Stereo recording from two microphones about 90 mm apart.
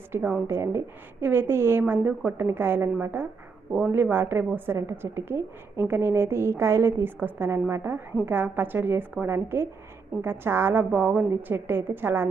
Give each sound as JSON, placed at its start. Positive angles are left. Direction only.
{"t": 0.1, "sound": "a woman's voice", "side_deg": -20}